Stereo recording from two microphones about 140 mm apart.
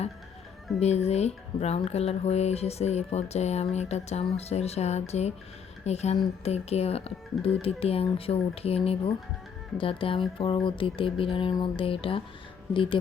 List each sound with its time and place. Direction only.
0.8 s speech: 50° left (ahead or behind)
9.7 s music: 40° left (ahead or behind)